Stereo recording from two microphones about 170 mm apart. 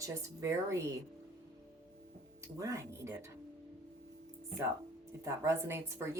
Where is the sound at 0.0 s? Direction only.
20° right (ahead or behind).